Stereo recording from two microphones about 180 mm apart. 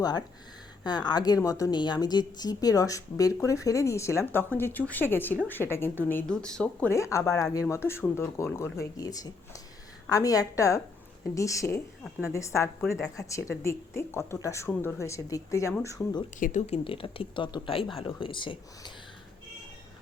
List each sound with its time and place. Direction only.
0.0 s speech: 20° left (ahead or behind)
16.4 s speech: 40° left (ahead or behind)